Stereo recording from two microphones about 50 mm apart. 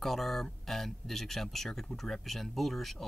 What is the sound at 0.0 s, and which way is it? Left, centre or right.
Speech, centre.